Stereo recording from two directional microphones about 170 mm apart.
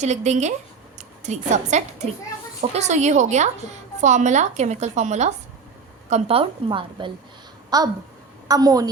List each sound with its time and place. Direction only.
0.0 s a woman's voice: 45° right (ahead or behind); by 8.9 s 20° right (ahead or behind)